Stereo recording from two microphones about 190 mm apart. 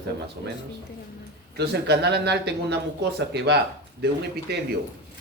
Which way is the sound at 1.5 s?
60° right (ahead or behind).